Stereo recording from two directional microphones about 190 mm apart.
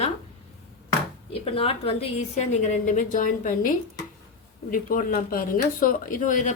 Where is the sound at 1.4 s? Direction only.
30° left (ahead or behind).